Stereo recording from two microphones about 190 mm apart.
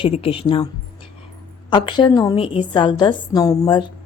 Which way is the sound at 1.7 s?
25° left (ahead or behind).